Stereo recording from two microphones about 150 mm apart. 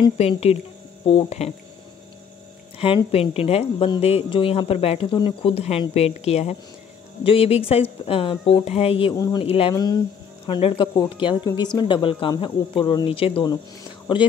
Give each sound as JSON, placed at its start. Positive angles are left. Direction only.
{"t": 0.2, "sound": "speech", "side_deg": 45}
{"t": 2.8, "sound": "speech", "side_deg": 40}
{"t": 9.1, "sound": "speech", "side_deg": 20}
{"t": 9.4, "sound": "speech", "side_deg": 40}
{"t": 9.8, "sound": "speech", "side_deg": 25}